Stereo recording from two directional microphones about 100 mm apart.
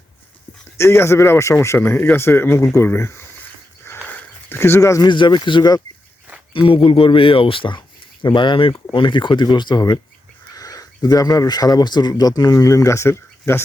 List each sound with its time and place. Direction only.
0.8 s a man's voice: 25° left (ahead or behind)
4.1 s a sound: 20° left (ahead or behind)
5.0 s speech: 50° left (ahead or behind)
6.5 s speech: 60° left (ahead or behind); by 13.6 s 25° left (ahead or behind)